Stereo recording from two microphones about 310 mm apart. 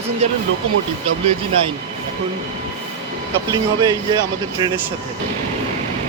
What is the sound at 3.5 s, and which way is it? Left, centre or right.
Speech, centre.